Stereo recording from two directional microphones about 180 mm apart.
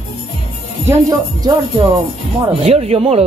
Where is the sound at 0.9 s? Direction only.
20° right (ahead or behind).